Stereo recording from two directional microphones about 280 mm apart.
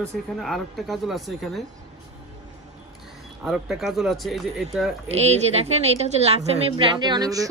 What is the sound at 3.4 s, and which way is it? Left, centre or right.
Speech, centre.